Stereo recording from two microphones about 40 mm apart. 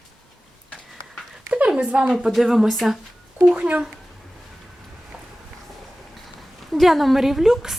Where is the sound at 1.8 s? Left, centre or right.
Right.